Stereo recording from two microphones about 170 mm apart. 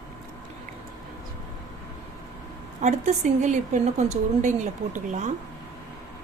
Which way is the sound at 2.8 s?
45° right (ahead or behind).